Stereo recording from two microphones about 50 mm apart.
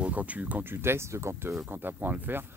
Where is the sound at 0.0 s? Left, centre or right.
Right.